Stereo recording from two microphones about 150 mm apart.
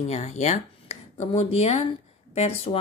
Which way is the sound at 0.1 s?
50° left (ahead or behind).